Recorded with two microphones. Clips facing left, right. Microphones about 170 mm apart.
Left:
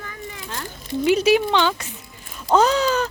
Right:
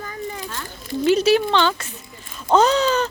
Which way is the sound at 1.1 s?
10° left (ahead or behind).